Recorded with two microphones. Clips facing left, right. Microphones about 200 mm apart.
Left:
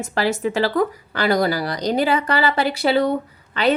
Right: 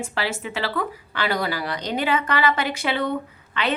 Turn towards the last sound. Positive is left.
turn(degrees=35)  # may be behind; listen again after turning